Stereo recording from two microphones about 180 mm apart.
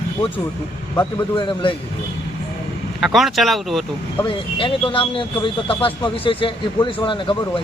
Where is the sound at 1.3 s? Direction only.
30° left (ahead or behind).